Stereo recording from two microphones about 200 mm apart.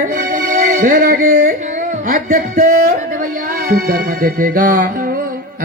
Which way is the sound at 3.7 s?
45° right (ahead or behind).